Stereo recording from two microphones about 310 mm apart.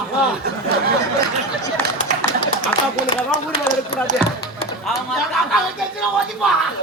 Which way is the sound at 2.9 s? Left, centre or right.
Right.